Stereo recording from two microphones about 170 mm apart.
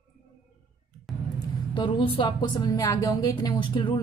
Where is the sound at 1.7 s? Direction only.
30° left (ahead or behind).